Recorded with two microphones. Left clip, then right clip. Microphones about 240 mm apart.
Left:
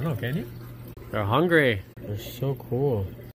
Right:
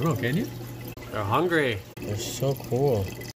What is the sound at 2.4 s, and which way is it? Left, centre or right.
Speech, centre.